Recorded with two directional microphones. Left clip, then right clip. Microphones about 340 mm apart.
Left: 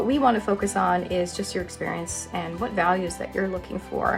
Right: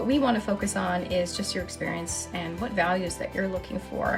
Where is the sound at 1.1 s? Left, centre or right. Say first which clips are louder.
Left 1 dB; centre.